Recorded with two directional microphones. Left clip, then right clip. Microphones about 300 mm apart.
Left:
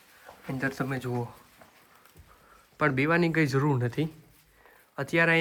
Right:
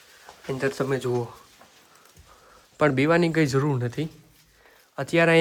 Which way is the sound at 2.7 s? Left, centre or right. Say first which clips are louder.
Right 5 dB; centre.